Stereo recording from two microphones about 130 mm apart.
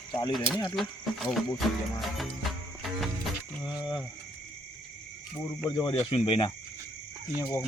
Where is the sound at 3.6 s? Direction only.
30° left (ahead or behind).